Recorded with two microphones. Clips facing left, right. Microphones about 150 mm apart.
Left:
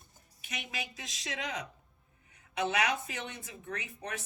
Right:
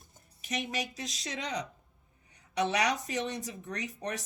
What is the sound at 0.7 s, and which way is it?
Speech, 40° right (ahead or behind).